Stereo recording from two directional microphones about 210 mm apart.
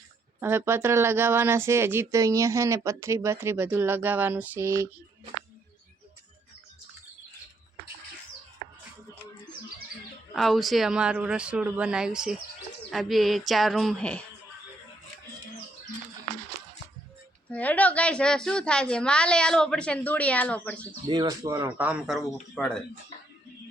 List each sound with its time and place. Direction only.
0.3 s speech: 10° right (ahead or behind)
10.3 s a woman's voice: centre (ahead or behind)
17.5 s a woman's voice: 5° left (ahead or behind)
21.1 s a woman's voice: 20° right (ahead or behind); by 22.8 s 5° left (ahead or behind)